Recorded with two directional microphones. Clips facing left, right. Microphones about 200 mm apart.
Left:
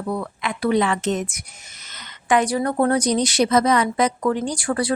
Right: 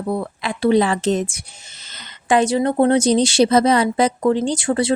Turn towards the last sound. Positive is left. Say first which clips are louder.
# right 4 dB
turn(degrees=-25)  # may be behind; listen again after turning